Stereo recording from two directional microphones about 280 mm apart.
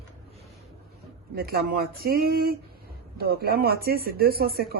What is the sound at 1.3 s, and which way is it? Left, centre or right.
Speech, right.